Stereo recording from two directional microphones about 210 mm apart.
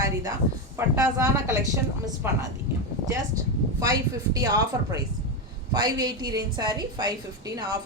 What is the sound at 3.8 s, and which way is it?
A woman's voice, 15° right (ahead or behind).